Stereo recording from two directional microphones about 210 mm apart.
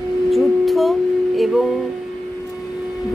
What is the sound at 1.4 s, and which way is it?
Music, centre (ahead or behind).